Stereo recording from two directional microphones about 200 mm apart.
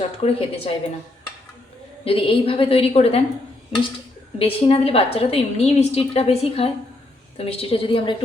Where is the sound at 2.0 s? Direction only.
30° left (ahead or behind).